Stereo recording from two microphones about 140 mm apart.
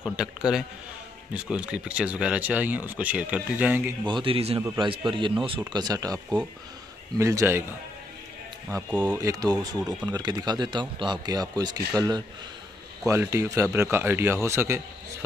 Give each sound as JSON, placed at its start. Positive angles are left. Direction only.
{"t": 0.0, "sound": "a man's voice", "side_deg": -5}
{"t": 4.0, "sound": "a man's voice", "side_deg": -35}
{"t": 9.0, "sound": "speech", "side_deg": -20}
{"t": 13.0, "sound": "speech", "side_deg": -20}